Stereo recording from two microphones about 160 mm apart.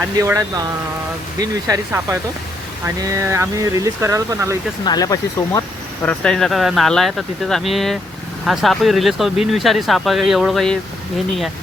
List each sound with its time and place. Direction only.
0.0 s speech: 15° right (ahead or behind)
4.9 s speech: 25° left (ahead or behind)
6.0 s speech: 5° left (ahead or behind)